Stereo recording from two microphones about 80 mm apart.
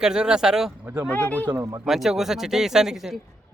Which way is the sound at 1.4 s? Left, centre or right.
Right.